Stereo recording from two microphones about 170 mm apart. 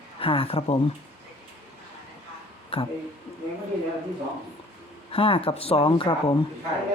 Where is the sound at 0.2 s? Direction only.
35° left (ahead or behind).